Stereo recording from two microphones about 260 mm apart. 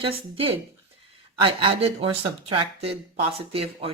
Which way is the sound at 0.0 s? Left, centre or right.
Right.